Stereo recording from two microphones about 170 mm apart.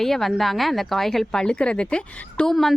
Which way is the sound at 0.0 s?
Centre (ahead or behind).